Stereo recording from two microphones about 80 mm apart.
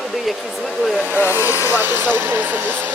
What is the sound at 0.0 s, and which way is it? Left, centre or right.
Speech, centre.